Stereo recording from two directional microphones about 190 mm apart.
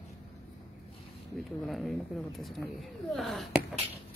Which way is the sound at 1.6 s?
Centre (ahead or behind).